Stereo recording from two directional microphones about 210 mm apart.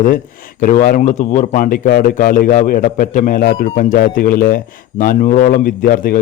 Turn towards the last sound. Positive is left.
turn(degrees=40)  # may be behind; listen again after turning